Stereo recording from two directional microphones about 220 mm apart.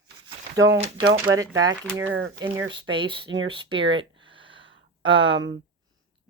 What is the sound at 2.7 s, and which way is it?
Speech, 20° right (ahead or behind).